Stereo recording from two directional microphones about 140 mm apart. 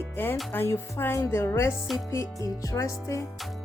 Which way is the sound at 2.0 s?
20° left (ahead or behind).